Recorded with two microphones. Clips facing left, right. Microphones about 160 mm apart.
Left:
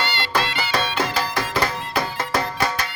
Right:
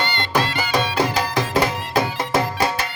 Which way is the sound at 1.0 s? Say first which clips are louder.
Right 3 dB; 15° right (ahead or behind).